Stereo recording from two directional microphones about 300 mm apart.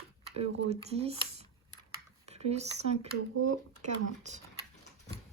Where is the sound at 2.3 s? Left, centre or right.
Right.